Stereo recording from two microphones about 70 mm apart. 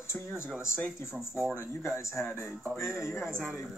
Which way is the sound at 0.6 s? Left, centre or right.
Left.